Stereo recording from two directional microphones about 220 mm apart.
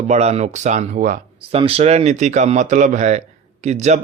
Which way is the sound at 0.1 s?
30° right (ahead or behind).